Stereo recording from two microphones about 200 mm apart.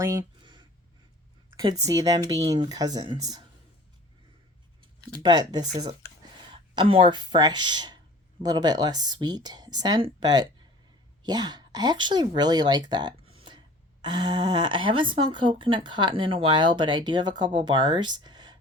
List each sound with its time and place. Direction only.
0.0 s a sound: 15° right (ahead or behind)
1.5 s speech: 15° right (ahead or behind)
5.2 s speech: 20° right (ahead or behind)